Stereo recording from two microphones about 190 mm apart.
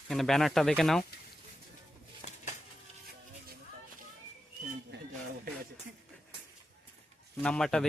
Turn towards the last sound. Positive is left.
turn(degrees=5)  # may be behind; listen again after turning